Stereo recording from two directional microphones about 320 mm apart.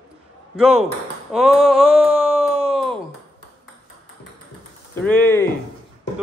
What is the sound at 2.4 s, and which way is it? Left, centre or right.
Groan, centre.